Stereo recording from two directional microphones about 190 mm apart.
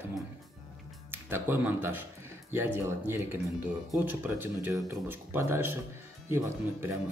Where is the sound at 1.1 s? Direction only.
10° right (ahead or behind).